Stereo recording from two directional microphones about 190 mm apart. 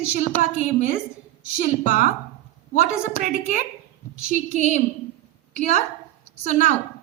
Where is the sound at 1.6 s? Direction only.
45° left (ahead or behind).